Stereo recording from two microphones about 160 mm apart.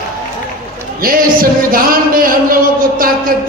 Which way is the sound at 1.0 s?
65° right (ahead or behind).